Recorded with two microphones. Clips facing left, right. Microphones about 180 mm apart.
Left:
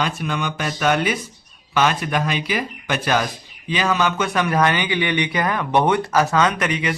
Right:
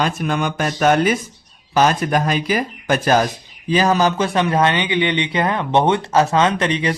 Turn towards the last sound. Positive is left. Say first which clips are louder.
# right 3 dB
turn(degrees=-30)  # may be behind; listen again after turning